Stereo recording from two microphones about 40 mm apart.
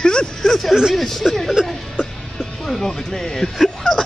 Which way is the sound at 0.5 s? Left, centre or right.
Centre.